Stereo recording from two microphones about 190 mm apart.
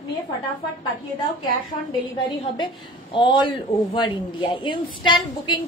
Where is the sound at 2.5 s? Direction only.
25° left (ahead or behind).